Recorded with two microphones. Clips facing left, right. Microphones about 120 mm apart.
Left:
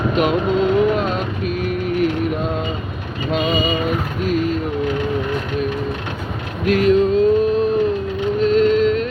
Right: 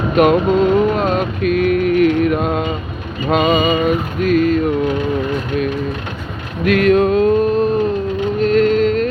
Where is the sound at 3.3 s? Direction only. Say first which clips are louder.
Right 5 dB; 75° right (ahead or behind).